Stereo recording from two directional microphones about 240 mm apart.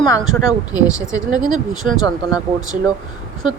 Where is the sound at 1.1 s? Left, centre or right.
Centre.